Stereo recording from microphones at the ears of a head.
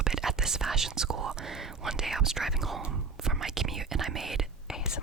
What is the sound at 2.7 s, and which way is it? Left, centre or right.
Whispering, right.